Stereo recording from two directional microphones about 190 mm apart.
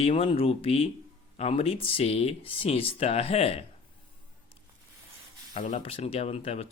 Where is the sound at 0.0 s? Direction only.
30° left (ahead or behind).